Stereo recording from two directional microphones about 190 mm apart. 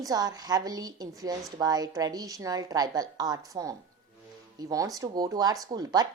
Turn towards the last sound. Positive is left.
turn(degrees=-20)  # may be behind; listen again after turning